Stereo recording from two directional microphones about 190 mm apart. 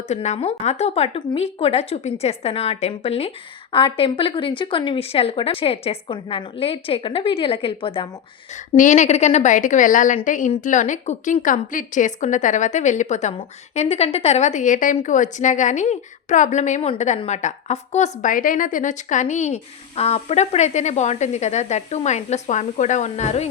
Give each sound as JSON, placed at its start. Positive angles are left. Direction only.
{"t": 0.1, "sound": "a woman's voice", "side_deg": 35}
{"t": 8.7, "sound": "a woman's voice", "side_deg": 40}